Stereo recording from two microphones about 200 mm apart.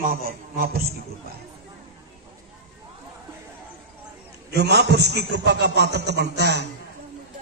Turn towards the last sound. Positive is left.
turn(degrees=-55)  # may be behind; listen again after turning